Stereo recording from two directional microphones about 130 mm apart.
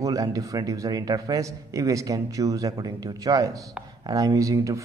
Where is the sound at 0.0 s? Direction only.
25° right (ahead or behind).